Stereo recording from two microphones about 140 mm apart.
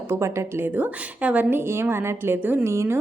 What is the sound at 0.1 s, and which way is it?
A woman's voice, 20° right (ahead or behind).